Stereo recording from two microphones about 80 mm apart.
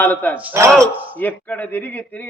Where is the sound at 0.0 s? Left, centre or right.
Left.